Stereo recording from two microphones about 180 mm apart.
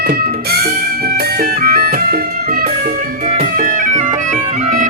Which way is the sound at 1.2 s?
55° right (ahead or behind).